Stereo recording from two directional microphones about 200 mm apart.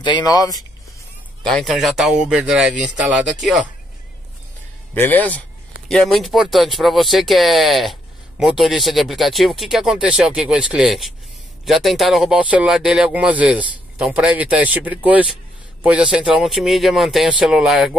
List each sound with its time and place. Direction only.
0.0 s speech: 20° left (ahead or behind)
1.5 s speech: centre (ahead or behind)
4.9 s a man's voice: 10° left (ahead or behind)